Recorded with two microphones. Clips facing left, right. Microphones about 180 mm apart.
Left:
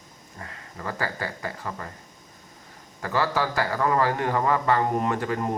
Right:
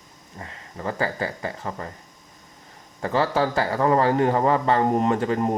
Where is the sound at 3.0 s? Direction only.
25° right (ahead or behind).